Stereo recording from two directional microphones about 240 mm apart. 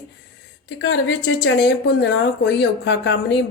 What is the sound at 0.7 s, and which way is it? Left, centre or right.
A woman's voice, left.